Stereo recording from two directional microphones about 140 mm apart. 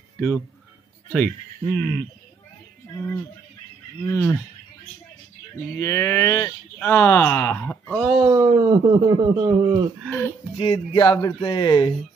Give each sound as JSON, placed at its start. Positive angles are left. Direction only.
{"t": 1.1, "sound": "speech", "side_deg": 15}
{"t": 2.9, "sound": "a sound", "side_deg": 20}
{"t": 5.8, "sound": "a sound", "side_deg": 20}
{"t": 6.8, "sound": "speech", "side_deg": 15}
{"t": 8.3, "sound": "speech", "side_deg": -30}
{"t": 10.0, "sound": "speech", "side_deg": 10}
{"t": 10.6, "sound": "speech", "side_deg": 35}